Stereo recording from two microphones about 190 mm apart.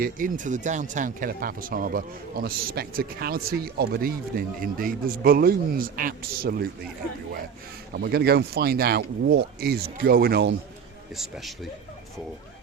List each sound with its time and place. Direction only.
0.0 s speech: 45° right (ahead or behind)
7.9 s speech: 60° right (ahead or behind)
11.2 s a man's voice: centre (ahead or behind)